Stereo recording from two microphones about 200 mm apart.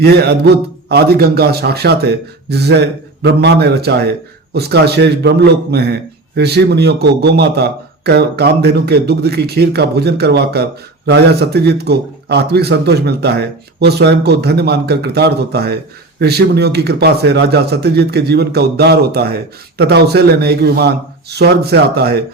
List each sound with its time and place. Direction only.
0.0 s a man's voice: 55° right (ahead or behind)